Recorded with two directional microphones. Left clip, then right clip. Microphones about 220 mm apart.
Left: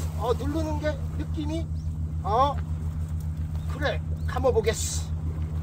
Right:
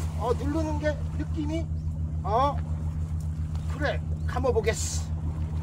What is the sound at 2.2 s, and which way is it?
Speech, 25° left (ahead or behind).